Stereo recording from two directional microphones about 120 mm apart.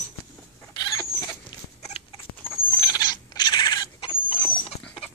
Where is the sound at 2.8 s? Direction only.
35° left (ahead or behind).